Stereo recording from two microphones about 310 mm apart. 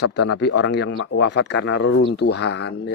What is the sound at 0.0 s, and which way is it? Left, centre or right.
Speech, left.